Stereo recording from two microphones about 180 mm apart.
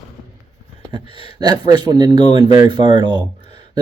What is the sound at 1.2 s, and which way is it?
Speech, 25° right (ahead or behind).